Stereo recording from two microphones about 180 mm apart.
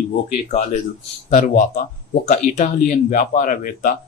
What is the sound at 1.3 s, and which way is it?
Speech, 45° left (ahead or behind).